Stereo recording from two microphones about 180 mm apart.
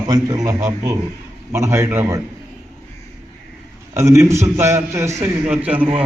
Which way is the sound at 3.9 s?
15° right (ahead or behind).